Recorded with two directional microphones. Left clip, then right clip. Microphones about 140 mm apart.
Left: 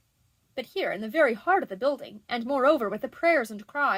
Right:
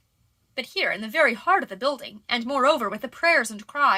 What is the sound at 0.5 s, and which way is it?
A woman's voice, 35° left (ahead or behind).